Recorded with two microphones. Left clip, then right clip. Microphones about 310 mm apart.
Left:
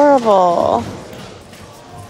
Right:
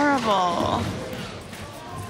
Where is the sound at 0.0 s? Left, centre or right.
Centre.